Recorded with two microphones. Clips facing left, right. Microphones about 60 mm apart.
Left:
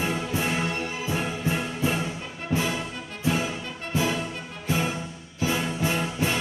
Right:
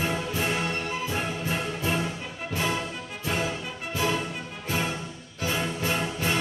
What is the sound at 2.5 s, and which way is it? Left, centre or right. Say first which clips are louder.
Music: left 3 dB; left.